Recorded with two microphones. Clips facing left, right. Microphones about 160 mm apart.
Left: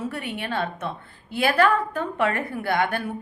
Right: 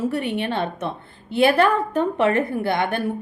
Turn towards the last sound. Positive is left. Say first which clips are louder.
# right 2 dB
turn(degrees=-25)  # may be behind; listen again after turning